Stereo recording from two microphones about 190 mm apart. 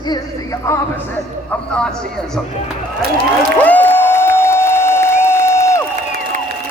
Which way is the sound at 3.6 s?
10° left (ahead or behind).